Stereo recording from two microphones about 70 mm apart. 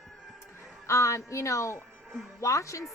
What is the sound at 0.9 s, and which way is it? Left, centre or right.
A woman's voice, left.